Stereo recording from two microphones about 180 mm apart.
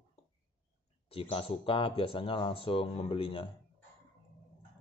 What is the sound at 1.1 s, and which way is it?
Speech, 30° left (ahead or behind).